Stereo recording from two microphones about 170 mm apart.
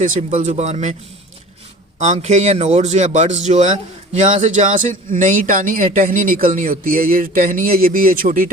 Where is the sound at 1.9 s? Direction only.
45° right (ahead or behind).